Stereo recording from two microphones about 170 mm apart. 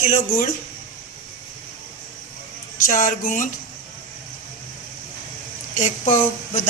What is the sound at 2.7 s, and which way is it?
Speech, 55° left (ahead or behind).